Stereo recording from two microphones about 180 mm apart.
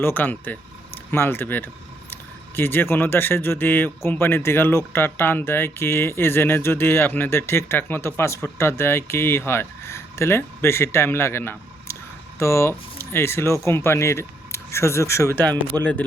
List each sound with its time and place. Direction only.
0.0 s speech: 10° left (ahead or behind)
15.4 s speech: 25° right (ahead or behind)